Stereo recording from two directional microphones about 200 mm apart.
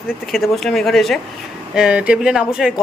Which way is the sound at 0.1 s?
Centre (ahead or behind).